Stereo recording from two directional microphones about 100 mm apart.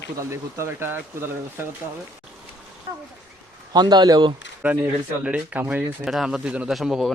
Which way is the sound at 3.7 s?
45° right (ahead or behind).